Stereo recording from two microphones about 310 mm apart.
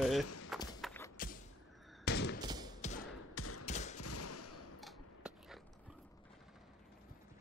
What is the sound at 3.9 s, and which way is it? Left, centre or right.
Gunshot, left.